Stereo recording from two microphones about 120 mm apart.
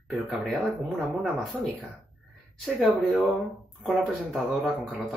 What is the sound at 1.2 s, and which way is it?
Speech, centre (ahead or behind).